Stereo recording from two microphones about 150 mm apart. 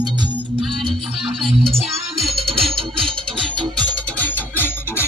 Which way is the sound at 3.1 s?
35° right (ahead or behind).